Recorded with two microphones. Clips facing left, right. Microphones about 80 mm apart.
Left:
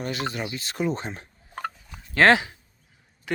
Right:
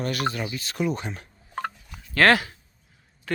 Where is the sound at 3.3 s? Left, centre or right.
Centre.